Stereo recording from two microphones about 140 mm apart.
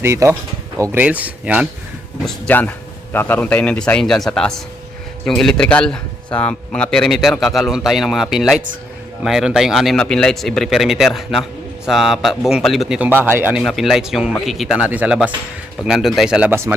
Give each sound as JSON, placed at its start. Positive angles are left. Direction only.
{"t": 0.0, "sound": "speech", "side_deg": -20}
{"t": 2.2, "sound": "a man's voice", "side_deg": 15}
{"t": 13.0, "sound": "speech", "side_deg": -15}
{"t": 13.6, "sound": "speech", "side_deg": 0}